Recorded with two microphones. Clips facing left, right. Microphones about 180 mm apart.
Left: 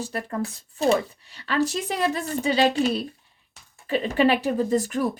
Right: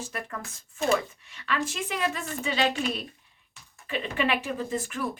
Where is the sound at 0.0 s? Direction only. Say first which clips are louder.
Left 8 dB; 35° left (ahead or behind).